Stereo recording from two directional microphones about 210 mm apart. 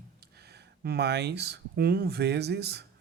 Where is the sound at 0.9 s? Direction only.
50° right (ahead or behind).